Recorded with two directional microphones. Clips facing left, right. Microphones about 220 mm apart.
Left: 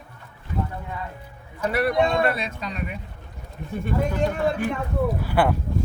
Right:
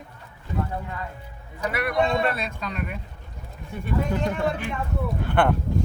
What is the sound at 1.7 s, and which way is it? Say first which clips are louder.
Speech: left 6 dB; 35° left (ahead or behind).